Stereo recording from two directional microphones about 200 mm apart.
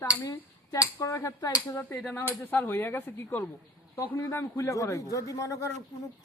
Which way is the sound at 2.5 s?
10° left (ahead or behind).